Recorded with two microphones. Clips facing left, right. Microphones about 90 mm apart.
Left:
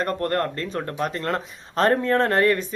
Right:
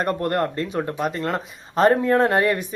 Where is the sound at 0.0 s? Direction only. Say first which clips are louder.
Right 2 dB; 15° right (ahead or behind).